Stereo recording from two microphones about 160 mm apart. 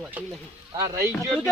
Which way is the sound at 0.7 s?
20° right (ahead or behind).